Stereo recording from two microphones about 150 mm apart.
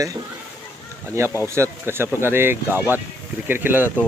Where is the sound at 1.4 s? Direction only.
15° right (ahead or behind).